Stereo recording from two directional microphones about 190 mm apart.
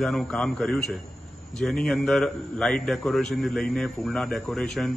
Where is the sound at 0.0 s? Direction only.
Centre (ahead or behind).